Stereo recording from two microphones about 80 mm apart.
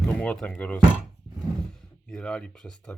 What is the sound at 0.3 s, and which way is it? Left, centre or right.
Speech, centre.